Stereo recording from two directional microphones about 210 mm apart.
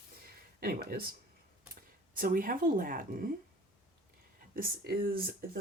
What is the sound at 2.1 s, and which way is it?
A woman's voice, 40° right (ahead or behind).